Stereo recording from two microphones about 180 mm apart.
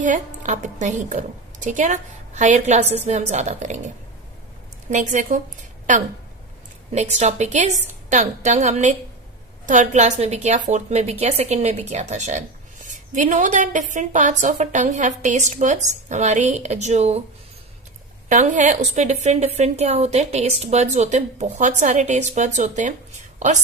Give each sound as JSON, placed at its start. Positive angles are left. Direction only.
{"t": 0.0, "sound": "a woman's voice", "side_deg": -45}
{"t": 18.3, "sound": "a woman's voice", "side_deg": -45}